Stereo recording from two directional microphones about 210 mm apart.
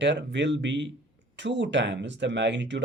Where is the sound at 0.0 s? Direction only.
55° right (ahead or behind).